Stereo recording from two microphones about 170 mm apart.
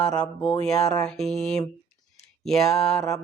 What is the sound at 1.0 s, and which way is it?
Speech, centre (ahead or behind).